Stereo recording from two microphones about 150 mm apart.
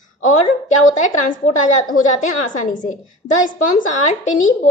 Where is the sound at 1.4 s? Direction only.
55° left (ahead or behind).